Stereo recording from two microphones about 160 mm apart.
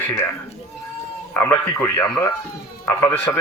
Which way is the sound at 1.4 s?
15° left (ahead or behind).